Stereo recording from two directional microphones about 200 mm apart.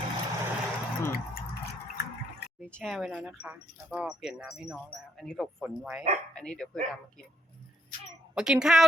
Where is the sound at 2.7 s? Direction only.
Centre (ahead or behind).